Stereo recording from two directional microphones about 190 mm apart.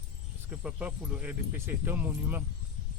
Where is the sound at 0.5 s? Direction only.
5° right (ahead or behind).